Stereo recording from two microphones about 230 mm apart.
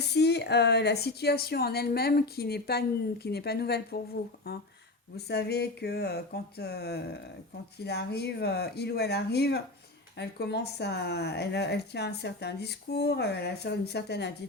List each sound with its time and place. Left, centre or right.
0.0 s speech: left